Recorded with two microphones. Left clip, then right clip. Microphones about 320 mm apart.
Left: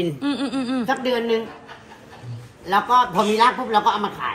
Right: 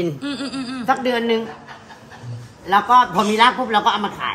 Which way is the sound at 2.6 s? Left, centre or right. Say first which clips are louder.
Right 3 dB; centre.